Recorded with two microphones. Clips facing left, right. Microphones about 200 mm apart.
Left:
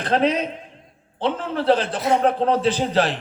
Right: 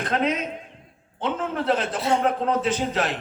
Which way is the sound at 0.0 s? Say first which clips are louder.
Left 4 dB; 30° left (ahead or behind).